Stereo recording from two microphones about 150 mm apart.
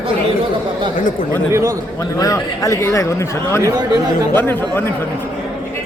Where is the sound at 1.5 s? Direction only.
20° right (ahead or behind).